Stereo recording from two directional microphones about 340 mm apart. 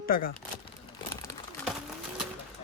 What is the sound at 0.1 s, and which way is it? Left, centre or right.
Speech, left.